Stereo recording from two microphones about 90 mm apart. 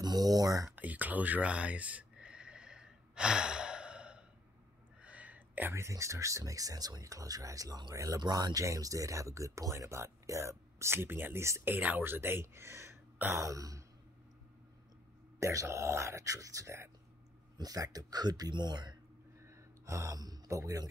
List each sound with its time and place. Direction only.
0.0 s speech: 45° right (ahead or behind)
0.7 s a sound: 20° right (ahead or behind)
5.7 s speech: 30° right (ahead or behind)
8.2 s speech: 50° right (ahead or behind)
15.3 s speech: 35° right (ahead or behind)
17.6 s speech: 45° right (ahead or behind)
19.4 s a sound: 35° right (ahead or behind)